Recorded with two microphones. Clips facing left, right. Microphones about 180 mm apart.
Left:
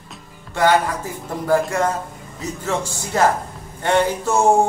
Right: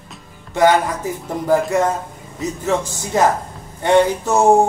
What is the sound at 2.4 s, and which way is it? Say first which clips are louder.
Music: right 4 dB; 20° right (ahead or behind).